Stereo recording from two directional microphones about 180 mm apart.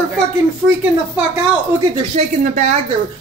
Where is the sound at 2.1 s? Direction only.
40° right (ahead or behind).